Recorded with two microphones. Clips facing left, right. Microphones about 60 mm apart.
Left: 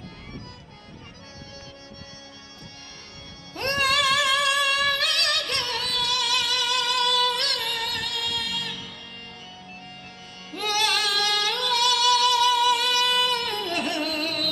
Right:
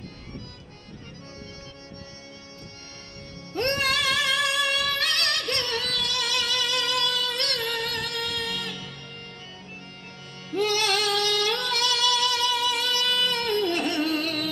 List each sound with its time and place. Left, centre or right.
4.1 s music: right
4.5 s music: left
4.9 s music: right
10.8 s music: right